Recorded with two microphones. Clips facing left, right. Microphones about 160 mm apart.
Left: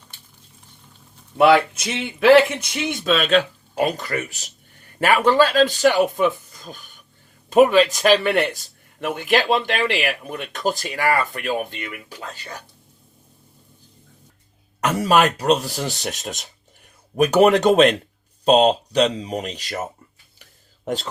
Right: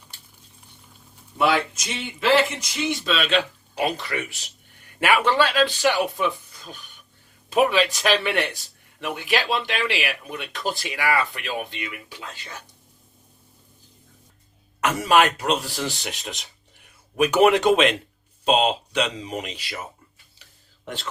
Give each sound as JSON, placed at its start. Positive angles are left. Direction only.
{"t": 1.4, "sound": "speech", "side_deg": 60}
{"t": 14.8, "sound": "speech", "side_deg": 35}
{"t": 20.4, "sound": "a sound", "side_deg": 40}